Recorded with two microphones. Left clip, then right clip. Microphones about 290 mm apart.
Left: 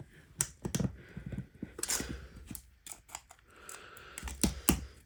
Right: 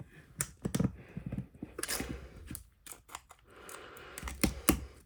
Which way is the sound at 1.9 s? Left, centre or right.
Centre.